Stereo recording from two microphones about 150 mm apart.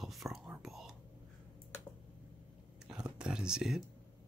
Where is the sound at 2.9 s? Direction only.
5° right (ahead or behind).